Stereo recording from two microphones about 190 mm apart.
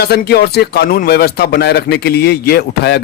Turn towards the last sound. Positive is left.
turn(degrees=60)  # may be behind; listen again after turning